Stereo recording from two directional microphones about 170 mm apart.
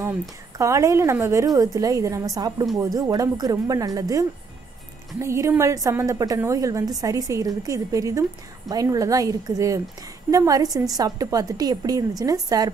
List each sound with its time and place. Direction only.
0.6 s a woman's voice: 20° right (ahead or behind)